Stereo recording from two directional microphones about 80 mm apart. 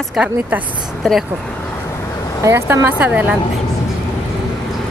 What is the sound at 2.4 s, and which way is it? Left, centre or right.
Speech, right.